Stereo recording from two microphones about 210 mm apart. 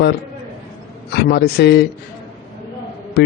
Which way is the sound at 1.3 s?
50° left (ahead or behind).